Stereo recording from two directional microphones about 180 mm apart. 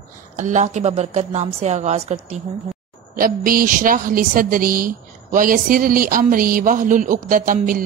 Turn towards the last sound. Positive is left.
turn(degrees=-50)  # may be behind; listen again after turning